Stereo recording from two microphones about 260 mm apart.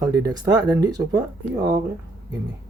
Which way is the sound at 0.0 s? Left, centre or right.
Centre.